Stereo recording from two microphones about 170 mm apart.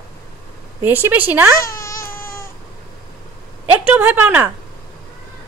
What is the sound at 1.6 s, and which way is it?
Baby cry, 15° left (ahead or behind).